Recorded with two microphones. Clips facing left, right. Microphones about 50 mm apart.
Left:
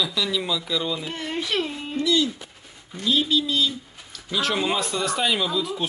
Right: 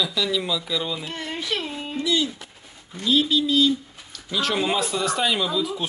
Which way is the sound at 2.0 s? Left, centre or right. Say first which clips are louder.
Left 2 dB; centre.